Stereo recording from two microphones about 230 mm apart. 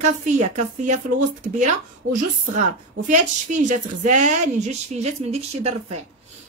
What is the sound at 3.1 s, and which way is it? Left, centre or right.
A woman's voice, right.